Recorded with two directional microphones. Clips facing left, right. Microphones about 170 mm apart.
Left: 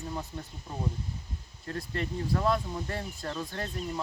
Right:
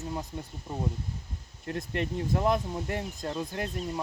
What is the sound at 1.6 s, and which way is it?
Speech, 20° right (ahead or behind).